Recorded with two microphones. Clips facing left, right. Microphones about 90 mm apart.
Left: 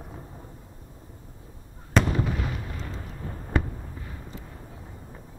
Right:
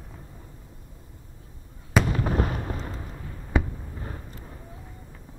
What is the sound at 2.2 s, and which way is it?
Artillery fire, 45° right (ahead or behind).